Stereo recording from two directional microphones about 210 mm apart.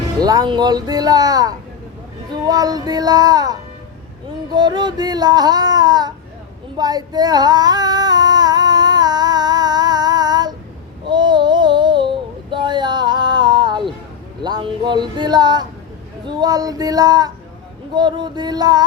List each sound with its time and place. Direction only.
0.2 s music: 20° right (ahead or behind)
6.7 s female singing: 20° right (ahead or behind)
11.0 s a sound: 20° right (ahead or behind)
14.4 s music: 20° right (ahead or behind)
16.2 s speech: 20° right (ahead or behind)
17.9 s music: 20° right (ahead or behind)